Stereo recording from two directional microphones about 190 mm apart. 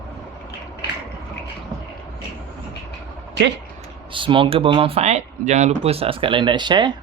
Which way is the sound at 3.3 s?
65° right (ahead or behind).